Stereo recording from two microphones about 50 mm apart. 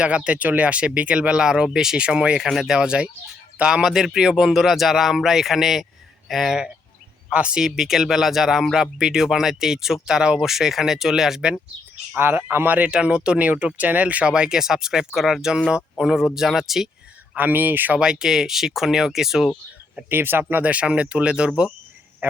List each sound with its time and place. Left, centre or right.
0.0 s speech: right
2.5 s speech: centre
2.8 s speech: centre
7.3 s speech: centre
7.6 s speech: centre
12.1 s speech: right
12.9 s speech: centre
13.7 s speech: right; by 16.9 s centre
17.3 s speech: right
17.9 s speech: centre
20.1 s speech: right
20.5 s speech: right
22.2 s honk: right